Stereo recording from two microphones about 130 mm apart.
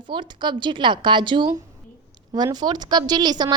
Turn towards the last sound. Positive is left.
turn(degrees=-30)  # may be behind; listen again after turning